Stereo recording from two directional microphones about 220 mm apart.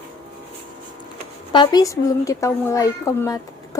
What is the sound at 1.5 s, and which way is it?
A child's voice, 20° left (ahead or behind).